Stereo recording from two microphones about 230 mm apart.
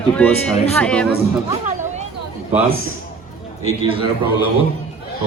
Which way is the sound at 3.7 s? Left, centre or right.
Right.